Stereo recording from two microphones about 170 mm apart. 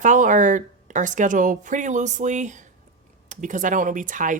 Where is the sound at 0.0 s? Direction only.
45° right (ahead or behind).